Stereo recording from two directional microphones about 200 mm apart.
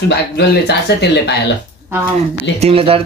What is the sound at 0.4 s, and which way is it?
Speech, 55° left (ahead or behind).